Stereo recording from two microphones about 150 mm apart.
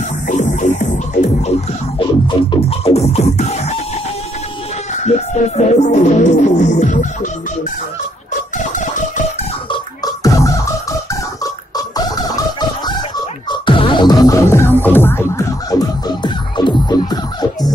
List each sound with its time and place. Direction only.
0.3 s music: 55° left (ahead or behind)
2.0 s music: 35° left (ahead or behind)
4.9 s music: 50° left (ahead or behind)
8.7 s music: 55° left (ahead or behind)
9.7 s music: 25° left (ahead or behind)